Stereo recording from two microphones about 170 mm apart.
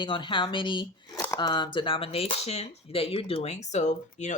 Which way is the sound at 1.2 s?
15° left (ahead or behind).